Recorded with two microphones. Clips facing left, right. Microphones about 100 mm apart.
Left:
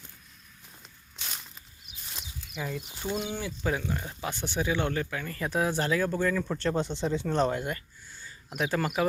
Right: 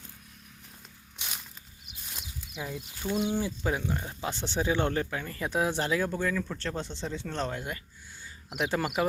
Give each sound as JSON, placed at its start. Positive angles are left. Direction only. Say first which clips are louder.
{"t": 2.6, "sound": "speech", "louder": "left 2 dB", "side_deg": -10}
{"t": 2.9, "sound": "speech", "louder": "right 5 dB", "side_deg": 20}
{"t": 3.4, "sound": "speech", "louder": "even", "side_deg": -20}
{"t": 5.2, "sound": "speech", "louder": "even", "side_deg": -20}
{"t": 6.1, "sound": "speech", "louder": "left 3 dB", "side_deg": 0}
{"t": 8.2, "sound": "speech", "louder": "even", "side_deg": -15}